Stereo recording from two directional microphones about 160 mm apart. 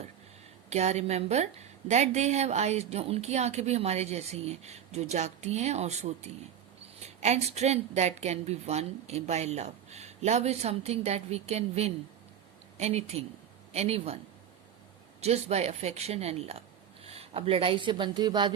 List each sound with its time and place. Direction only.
0.7 s a woman's voice: 45° right (ahead or behind)
15.2 s speech: 40° right (ahead or behind)